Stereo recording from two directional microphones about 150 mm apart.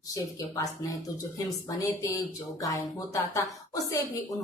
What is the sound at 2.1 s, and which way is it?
Speech, 20° left (ahead or behind).